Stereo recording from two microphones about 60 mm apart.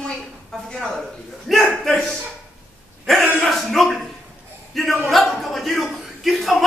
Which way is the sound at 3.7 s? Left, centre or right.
Centre.